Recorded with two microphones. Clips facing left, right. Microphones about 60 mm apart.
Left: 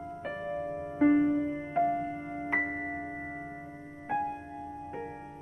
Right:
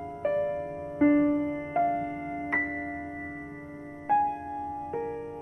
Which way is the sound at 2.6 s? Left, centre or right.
Centre.